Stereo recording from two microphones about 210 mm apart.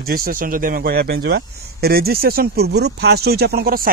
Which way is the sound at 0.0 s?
45° right (ahead or behind).